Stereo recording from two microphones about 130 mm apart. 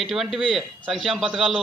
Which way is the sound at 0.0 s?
Centre (ahead or behind).